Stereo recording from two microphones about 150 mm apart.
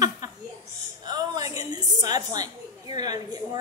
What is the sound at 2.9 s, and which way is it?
Speech, 25° right (ahead or behind).